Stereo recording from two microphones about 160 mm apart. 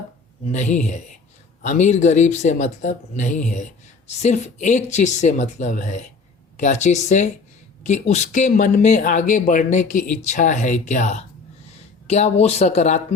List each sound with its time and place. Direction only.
0.5 s speech: 50° left (ahead or behind)